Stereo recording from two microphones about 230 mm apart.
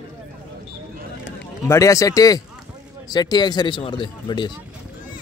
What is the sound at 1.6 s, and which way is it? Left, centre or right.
A man's voice, centre.